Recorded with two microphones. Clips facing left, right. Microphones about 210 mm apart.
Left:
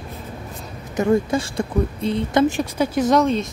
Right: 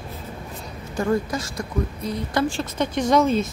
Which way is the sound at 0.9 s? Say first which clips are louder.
Left 5 dB; 20° left (ahead or behind).